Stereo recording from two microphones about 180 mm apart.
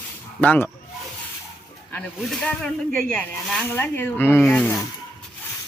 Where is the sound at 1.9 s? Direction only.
5° left (ahead or behind).